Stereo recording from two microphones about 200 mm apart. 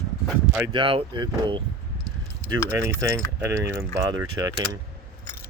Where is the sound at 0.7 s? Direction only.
25° right (ahead or behind).